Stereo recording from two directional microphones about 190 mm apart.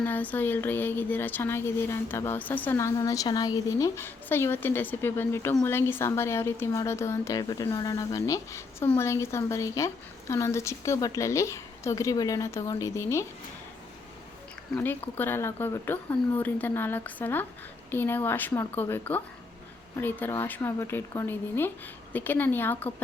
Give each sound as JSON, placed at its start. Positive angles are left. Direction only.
{"t": 0.0, "sound": "speech", "side_deg": 10}
{"t": 15.2, "sound": "speech", "side_deg": 10}